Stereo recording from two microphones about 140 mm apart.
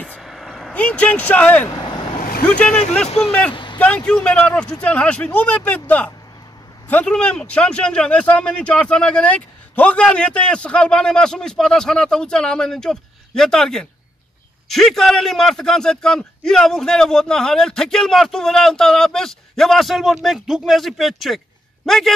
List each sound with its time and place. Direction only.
0.2 s vehicle: centre (ahead or behind)
2.4 s a man's voice: 10° left (ahead or behind)
3.5 s vehicle: 35° left (ahead or behind)
3.8 s a man's voice: 10° left (ahead or behind)